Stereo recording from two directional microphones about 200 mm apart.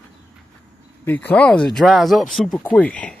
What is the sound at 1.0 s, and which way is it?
Speech, 10° left (ahead or behind).